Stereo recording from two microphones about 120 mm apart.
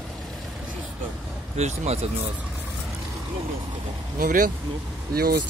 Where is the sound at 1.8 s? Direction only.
60° right (ahead or behind).